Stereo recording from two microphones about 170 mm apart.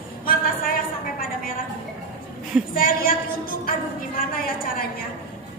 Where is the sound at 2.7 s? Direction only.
55° left (ahead or behind).